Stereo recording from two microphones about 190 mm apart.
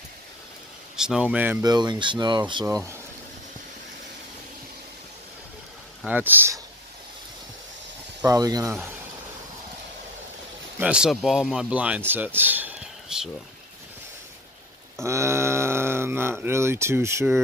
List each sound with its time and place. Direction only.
0.9 s speech: 5° right (ahead or behind)
1.6 s speech: 20° right (ahead or behind)
2.6 s speech: 15° right (ahead or behind)
6.0 s speech: 10° right (ahead or behind)
8.3 s speech: 20° right (ahead or behind)
10.8 s speech: 5° right (ahead or behind)
15.0 s speech: 15° right (ahead or behind)